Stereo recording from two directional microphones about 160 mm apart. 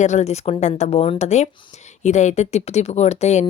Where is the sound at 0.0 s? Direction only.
45° left (ahead or behind).